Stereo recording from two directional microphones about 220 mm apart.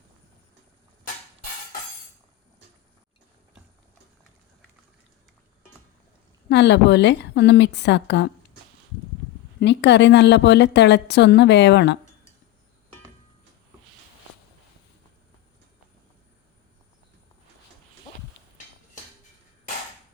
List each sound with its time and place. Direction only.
6.5 s a woman's voice: 50° left (ahead or behind)
9.6 s a woman's voice: 50° left (ahead or behind)